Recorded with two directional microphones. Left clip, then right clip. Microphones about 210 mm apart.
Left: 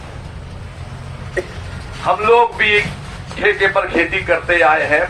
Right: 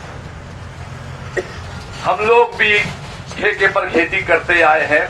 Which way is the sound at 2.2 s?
20° left (ahead or behind).